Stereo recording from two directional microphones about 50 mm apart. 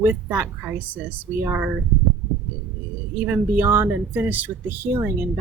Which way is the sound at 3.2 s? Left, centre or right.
Right.